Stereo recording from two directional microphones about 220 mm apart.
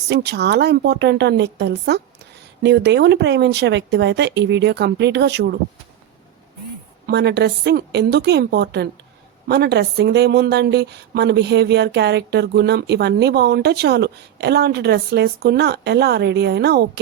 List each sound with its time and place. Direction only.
0.1 s a woman's voice: 50° right (ahead or behind)
7.1 s a woman's voice: 50° right (ahead or behind)